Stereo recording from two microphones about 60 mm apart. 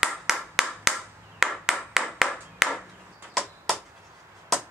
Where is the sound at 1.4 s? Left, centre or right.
Centre.